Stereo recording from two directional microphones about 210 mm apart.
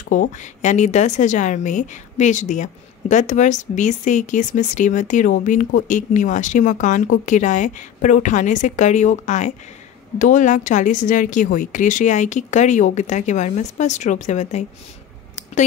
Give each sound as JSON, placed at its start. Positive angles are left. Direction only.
{"t": 0.1, "sound": "a woman's voice", "side_deg": 35}